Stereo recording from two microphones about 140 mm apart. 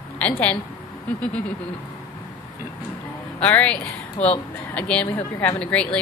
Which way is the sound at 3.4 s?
10° left (ahead or behind).